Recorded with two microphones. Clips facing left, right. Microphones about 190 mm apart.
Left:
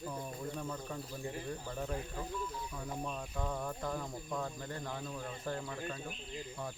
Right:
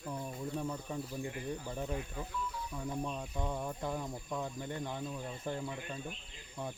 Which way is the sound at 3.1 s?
15° right (ahead or behind).